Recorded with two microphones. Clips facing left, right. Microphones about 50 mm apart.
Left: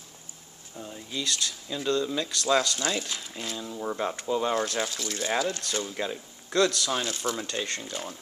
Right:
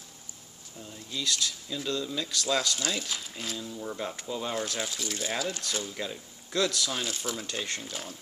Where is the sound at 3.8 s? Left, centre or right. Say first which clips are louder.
Left 8 dB; left.